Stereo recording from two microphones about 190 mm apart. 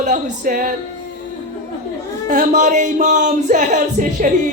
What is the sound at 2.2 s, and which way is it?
Speech, 40° right (ahead or behind).